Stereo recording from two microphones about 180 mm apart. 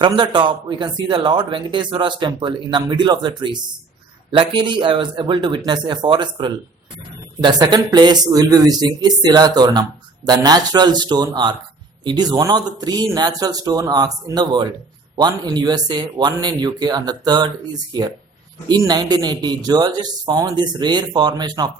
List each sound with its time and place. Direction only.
0.0 s a man's voice: 25° right (ahead or behind)
18.7 s a man's voice: 20° right (ahead or behind)